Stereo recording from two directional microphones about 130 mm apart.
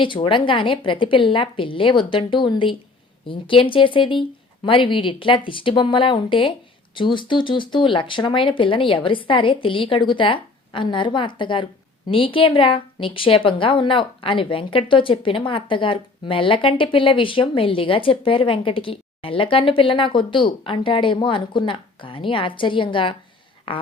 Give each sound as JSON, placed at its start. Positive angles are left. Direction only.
{"t": 0.0, "sound": "a woman's voice", "side_deg": 40}